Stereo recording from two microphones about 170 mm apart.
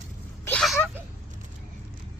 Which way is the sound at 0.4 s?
5° left (ahead or behind).